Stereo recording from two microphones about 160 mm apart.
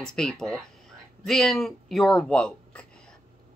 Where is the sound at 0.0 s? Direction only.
5° left (ahead or behind).